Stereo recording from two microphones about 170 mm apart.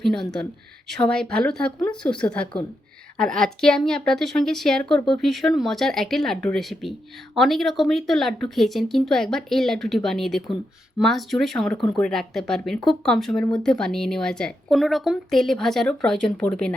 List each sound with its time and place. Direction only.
0.0 s speech: centre (ahead or behind)